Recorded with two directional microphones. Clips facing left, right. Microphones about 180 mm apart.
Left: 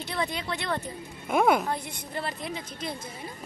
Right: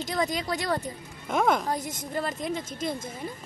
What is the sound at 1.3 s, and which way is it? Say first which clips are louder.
Speech: left 2 dB; 5° left (ahead or behind).